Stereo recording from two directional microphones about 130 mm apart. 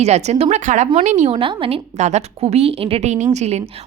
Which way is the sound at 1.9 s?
60° right (ahead or behind).